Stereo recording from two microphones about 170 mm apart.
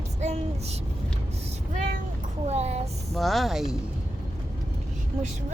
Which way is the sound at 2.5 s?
40° right (ahead or behind).